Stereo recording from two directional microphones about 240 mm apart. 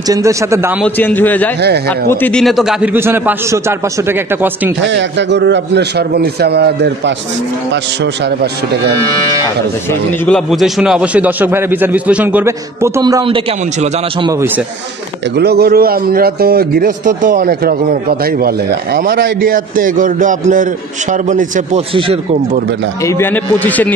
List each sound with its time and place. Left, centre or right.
0.1 s a man's voice: centre
0.8 s a man's voice: centre
4.8 s a man's voice: right
10.2 s a man's voice: centre
15.3 s speech: right
23.0 s a man's voice: centre